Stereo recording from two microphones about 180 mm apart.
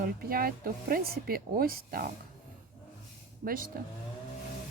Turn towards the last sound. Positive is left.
turn(degrees=-50)  # may be behind; listen again after turning